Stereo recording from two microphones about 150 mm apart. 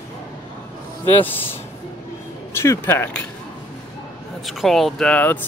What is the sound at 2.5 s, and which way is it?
Speech, 15° left (ahead or behind).